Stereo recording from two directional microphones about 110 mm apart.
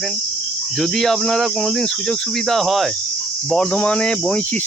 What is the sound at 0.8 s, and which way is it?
Speech, centre (ahead or behind).